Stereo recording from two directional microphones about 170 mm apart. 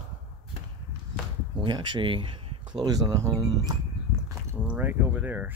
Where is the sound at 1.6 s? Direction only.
25° right (ahead or behind).